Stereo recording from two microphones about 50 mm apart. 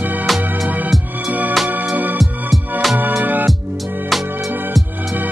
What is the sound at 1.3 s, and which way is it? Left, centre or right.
Music, right.